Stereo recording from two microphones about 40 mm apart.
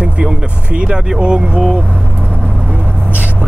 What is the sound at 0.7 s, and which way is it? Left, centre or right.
Speech, right.